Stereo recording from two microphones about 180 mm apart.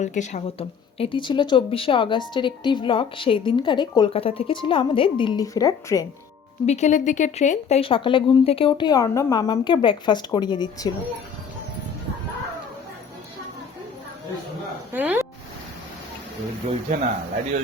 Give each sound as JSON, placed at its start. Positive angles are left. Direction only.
{"t": 0.0, "sound": "a woman's voice", "side_deg": 40}
{"t": 6.7, "sound": "a woman's voice", "side_deg": 40}
{"t": 14.9, "sound": "speech", "side_deg": -10}
{"t": 16.9, "sound": "speech", "side_deg": -40}